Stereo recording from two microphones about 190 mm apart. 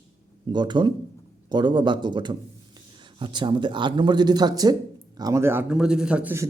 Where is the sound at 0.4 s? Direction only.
25° right (ahead or behind).